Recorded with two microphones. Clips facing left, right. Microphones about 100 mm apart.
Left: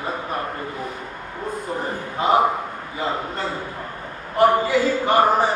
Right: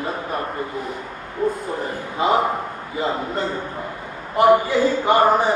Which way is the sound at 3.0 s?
25° right (ahead or behind).